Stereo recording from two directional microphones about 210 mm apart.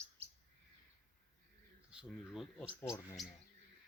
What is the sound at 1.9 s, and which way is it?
Speech, 5° right (ahead or behind).